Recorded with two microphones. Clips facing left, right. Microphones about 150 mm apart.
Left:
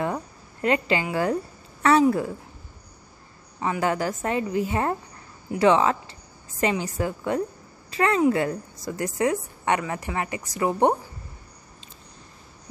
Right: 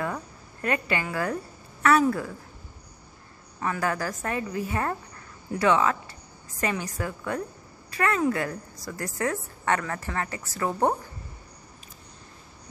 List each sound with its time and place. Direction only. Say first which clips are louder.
0.0 s a sound: left 4 dB; 25° left (ahead or behind)
1.1 s a woman's voice: left 5 dB; 25° left (ahead or behind)
3.6 s a woman's voice: left 3 dB; 20° left (ahead or behind)